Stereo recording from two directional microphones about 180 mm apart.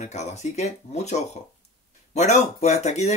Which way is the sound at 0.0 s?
40° left (ahead or behind).